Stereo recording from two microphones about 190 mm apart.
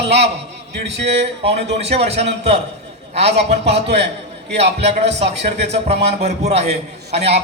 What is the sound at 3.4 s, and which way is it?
Speech, 35° right (ahead or behind).